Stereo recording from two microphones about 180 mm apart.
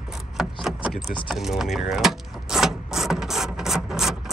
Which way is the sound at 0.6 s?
Centre (ahead or behind).